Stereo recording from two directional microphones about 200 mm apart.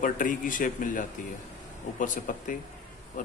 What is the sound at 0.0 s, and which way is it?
A man's voice, 40° left (ahead or behind).